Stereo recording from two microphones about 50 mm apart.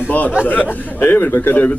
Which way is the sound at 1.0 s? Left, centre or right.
Left.